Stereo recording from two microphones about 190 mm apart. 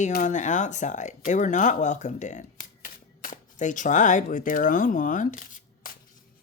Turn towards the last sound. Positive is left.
turn(degrees=45)  # may be behind; listen again after turning